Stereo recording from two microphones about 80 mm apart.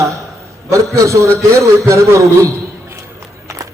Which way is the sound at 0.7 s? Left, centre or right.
Right.